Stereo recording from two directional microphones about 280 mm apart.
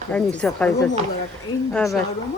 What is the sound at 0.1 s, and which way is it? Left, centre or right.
Speech, centre.